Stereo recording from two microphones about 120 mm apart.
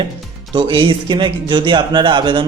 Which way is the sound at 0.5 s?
45° right (ahead or behind).